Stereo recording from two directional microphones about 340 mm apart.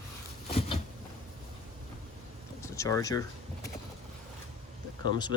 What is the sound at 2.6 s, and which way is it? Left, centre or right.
Speech, centre.